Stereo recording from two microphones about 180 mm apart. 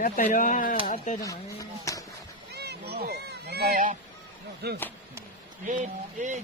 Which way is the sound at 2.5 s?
65° right (ahead or behind).